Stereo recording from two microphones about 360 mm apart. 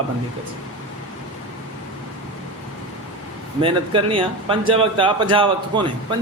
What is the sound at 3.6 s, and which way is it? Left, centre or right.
Speech, centre.